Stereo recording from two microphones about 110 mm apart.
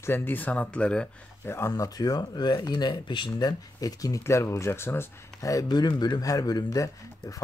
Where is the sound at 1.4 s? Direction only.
25° left (ahead or behind).